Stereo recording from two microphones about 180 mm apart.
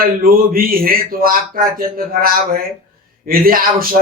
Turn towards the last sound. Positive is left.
turn(degrees=-55)  # may be behind; listen again after turning